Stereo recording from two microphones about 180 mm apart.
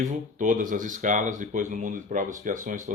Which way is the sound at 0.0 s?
45° right (ahead or behind).